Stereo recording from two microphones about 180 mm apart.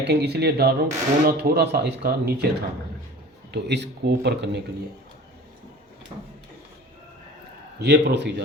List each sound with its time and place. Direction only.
0.0 s speech: 70° right (ahead or behind)
7.8 s a man's voice: 70° right (ahead or behind)